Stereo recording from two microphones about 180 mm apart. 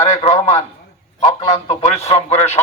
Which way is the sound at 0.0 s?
40° left (ahead or behind).